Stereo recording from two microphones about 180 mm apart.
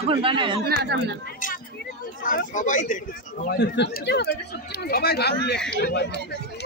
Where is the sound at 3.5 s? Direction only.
70° left (ahead or behind).